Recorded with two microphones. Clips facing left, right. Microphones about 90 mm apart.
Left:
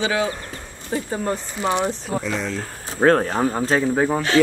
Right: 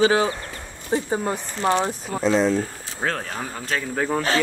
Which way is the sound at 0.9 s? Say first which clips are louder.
Right 2 dB; 25° right (ahead or behind).